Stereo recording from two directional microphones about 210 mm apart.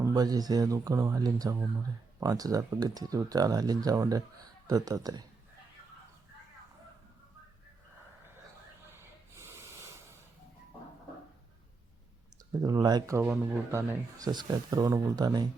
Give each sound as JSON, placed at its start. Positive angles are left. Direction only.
{"t": 0.0, "sound": "speech", "side_deg": -15}
{"t": 9.0, "sound": "snort", "side_deg": -15}
{"t": 12.6, "sound": "speech", "side_deg": -20}